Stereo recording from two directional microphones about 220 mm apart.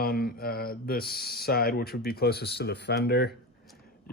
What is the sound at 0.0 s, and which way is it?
Speech, 45° left (ahead or behind).